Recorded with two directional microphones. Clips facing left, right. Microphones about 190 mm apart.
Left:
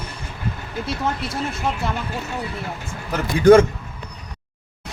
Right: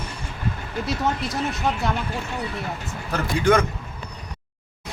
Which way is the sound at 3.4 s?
35° left (ahead or behind).